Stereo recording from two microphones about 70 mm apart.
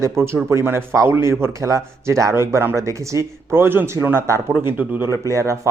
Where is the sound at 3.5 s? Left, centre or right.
Right.